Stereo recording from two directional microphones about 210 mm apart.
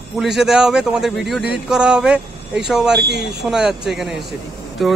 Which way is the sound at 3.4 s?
Centre (ahead or behind).